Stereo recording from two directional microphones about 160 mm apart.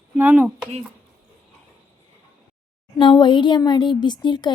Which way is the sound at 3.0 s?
30° left (ahead or behind).